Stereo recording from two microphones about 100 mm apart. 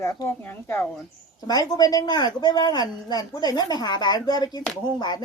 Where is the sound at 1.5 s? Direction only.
40° left (ahead or behind).